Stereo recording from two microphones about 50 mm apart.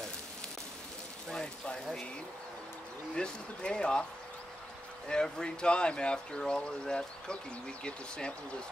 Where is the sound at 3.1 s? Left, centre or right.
Centre.